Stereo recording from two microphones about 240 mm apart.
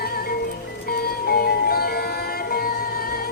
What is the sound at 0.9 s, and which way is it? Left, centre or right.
Music, left.